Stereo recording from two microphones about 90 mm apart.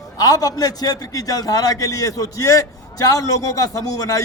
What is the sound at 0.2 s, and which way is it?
A man's voice, 45° left (ahead or behind).